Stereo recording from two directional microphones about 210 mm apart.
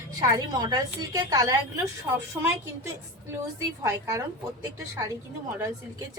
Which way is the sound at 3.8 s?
15° right (ahead or behind).